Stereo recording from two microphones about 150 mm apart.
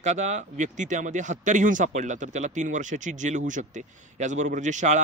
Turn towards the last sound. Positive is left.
turn(degrees=-55)  # may be behind; listen again after turning